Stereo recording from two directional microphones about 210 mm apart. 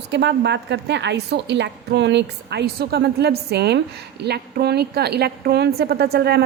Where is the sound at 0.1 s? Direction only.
55° right (ahead or behind).